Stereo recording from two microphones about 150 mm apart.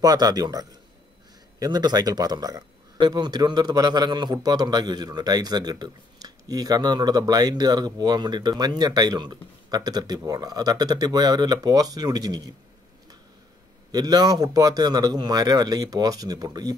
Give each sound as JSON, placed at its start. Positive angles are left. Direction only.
{"t": 0.0, "sound": "speech", "side_deg": -25}
{"t": 13.9, "sound": "speech", "side_deg": -25}